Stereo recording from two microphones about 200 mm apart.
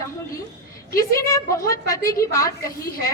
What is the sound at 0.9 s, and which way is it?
A woman's voice, 15° left (ahead or behind).